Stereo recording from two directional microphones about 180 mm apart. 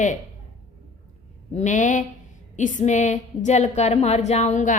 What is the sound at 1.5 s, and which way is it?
A woman's voice, 40° left (ahead or behind).